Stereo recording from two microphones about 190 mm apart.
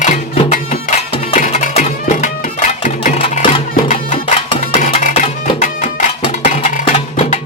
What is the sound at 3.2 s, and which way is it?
Music, 30° left (ahead or behind).